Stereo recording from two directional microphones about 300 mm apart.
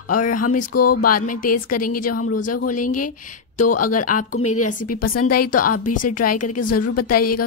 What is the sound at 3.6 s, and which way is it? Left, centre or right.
Speech, left.